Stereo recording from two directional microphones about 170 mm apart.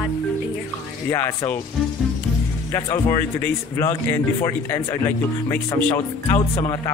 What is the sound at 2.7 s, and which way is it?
Speech, 20° left (ahead or behind).